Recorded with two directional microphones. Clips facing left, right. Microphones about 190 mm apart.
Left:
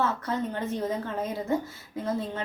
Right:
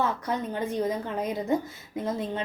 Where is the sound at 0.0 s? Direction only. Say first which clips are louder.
Even; 15° right (ahead or behind).